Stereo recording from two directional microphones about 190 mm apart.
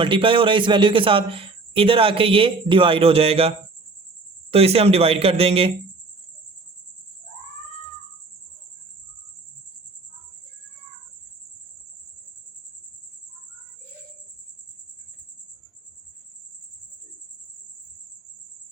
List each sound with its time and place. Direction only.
0.0 s a man's voice: 25° right (ahead or behind)
4.5 s speech: 30° right (ahead or behind)